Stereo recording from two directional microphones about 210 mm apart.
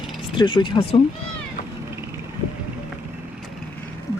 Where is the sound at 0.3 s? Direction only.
25° left (ahead or behind).